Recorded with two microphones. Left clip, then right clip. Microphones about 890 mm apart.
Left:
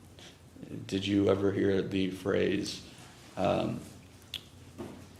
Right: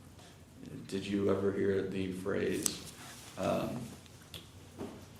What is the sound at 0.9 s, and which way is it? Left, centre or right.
Speech, left.